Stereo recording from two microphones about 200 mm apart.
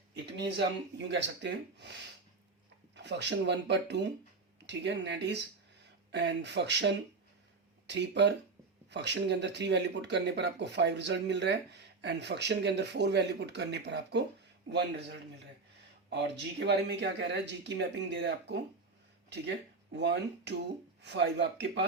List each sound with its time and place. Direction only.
0.3 s speech: 60° right (ahead or behind)
2.9 s speech: 60° right (ahead or behind)
16.0 s speech: 60° right (ahead or behind)
19.9 s speech: 60° right (ahead or behind)